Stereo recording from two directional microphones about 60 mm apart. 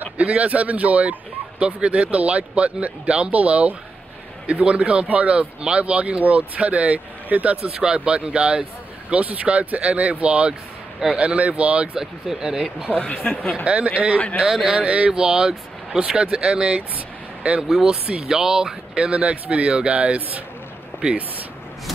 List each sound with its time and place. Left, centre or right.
0.0 s speech: right
7.8 s speech: centre
12.0 s speech: centre
12.9 s speech: left
13.7 s speech: right
14.3 s speech: centre
16.9 s vehicle: centre
17.6 s speech: centre